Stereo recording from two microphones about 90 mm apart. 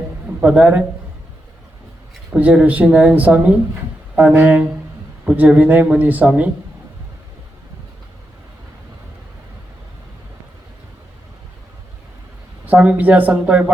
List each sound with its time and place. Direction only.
0.3 s a man's voice: 15° right (ahead or behind)
2.3 s speech: 15° right (ahead or behind)
12.6 s speech: 15° right (ahead or behind)